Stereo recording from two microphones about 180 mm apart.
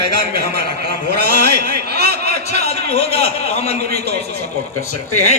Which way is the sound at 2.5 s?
65° right (ahead or behind).